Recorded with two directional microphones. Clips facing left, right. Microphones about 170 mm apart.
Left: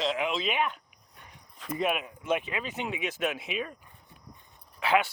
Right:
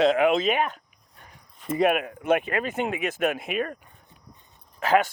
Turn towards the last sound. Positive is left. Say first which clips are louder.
# right 4 dB
turn(degrees=-45)  # may be behind; listen again after turning